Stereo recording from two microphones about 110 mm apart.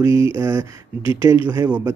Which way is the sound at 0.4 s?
35° right (ahead or behind).